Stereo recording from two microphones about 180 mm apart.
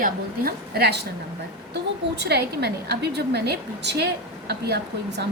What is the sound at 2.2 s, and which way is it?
A woman's voice, 65° right (ahead or behind).